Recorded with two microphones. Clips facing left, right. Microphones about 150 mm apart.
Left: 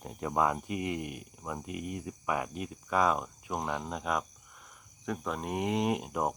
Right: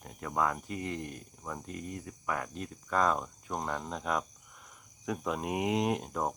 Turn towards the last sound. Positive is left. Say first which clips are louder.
# left 1 dB
turn(degrees=10)  # may be behind; listen again after turning